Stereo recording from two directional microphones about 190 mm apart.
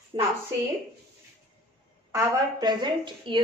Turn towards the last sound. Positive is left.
turn(degrees=-25)  # may be behind; listen again after turning